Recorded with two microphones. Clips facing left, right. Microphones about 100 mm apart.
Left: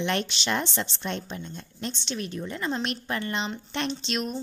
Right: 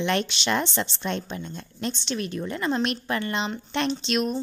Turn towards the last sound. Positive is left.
turn(degrees=-75)  # may be behind; listen again after turning